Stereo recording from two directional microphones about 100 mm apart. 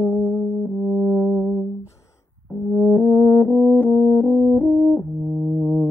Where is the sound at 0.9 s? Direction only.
15° left (ahead or behind).